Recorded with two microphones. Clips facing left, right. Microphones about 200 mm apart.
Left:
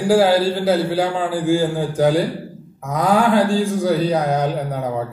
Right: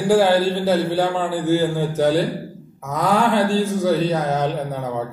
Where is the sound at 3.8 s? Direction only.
15° left (ahead or behind).